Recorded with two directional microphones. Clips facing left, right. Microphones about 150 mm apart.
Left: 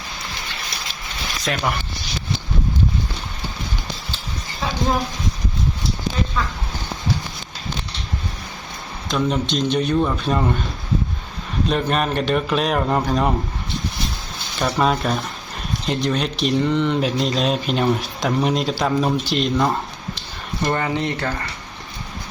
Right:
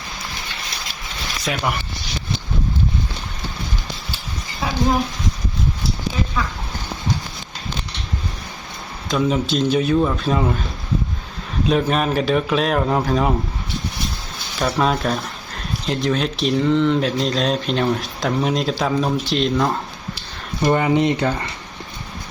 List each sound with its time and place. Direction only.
1.5 s speech: 5° right (ahead or behind)
9.0 s speech: centre (ahead or behind)
11.6 s speech: centre (ahead or behind)
14.6 s speech: centre (ahead or behind)
20.6 s speech: 15° right (ahead or behind)